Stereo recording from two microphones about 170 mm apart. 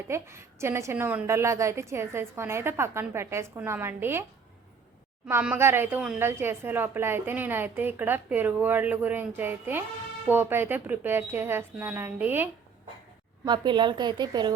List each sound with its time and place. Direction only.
0.1 s a woman's voice: 15° right (ahead or behind)
5.3 s a woman's voice: 10° right (ahead or behind)
13.4 s a woman's voice: 25° right (ahead or behind)